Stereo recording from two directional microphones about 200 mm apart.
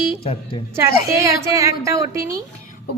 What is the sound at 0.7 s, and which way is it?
A woman's voice, 15° right (ahead or behind).